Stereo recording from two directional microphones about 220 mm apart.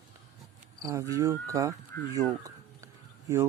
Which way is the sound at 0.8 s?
15° right (ahead or behind).